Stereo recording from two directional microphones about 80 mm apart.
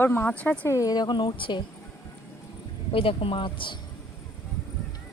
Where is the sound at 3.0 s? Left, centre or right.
Left.